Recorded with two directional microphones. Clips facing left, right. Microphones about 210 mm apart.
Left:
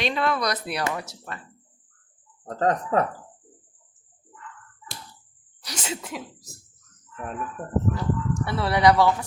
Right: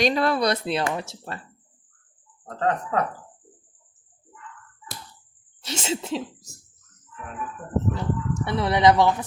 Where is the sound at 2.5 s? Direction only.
40° left (ahead or behind).